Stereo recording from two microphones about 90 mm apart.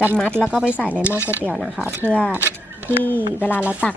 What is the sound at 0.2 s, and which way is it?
Speech, 10° left (ahead or behind).